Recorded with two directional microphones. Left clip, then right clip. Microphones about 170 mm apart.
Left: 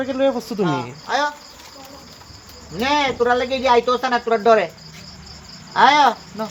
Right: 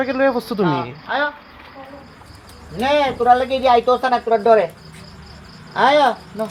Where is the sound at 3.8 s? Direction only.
5° left (ahead or behind).